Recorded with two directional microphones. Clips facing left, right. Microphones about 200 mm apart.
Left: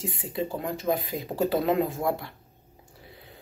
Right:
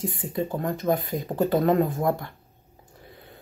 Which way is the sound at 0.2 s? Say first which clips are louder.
Right 2 dB; 45° right (ahead or behind).